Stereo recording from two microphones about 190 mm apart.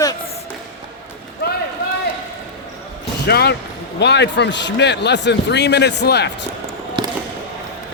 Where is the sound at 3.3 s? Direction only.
55° left (ahead or behind).